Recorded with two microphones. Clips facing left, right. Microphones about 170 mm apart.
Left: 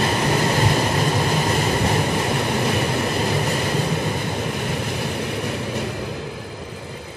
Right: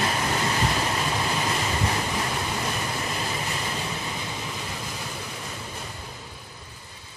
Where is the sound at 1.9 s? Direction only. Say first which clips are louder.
Left 7 dB; 65° left (ahead or behind).